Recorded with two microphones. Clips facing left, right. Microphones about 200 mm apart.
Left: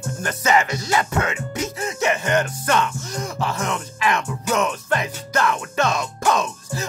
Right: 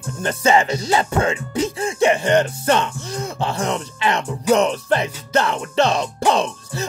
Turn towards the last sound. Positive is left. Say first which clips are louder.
# right 3 dB
turn(degrees=-30)  # may be behind; listen again after turning